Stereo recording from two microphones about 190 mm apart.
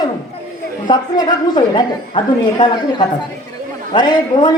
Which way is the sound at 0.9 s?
20° left (ahead or behind).